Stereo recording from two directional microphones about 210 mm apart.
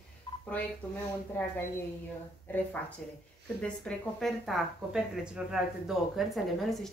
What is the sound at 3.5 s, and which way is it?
Speech, 5° left (ahead or behind).